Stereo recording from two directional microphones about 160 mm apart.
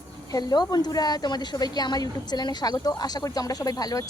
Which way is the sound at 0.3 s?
25° left (ahead or behind).